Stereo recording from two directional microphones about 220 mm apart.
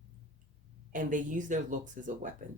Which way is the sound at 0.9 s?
35° right (ahead or behind).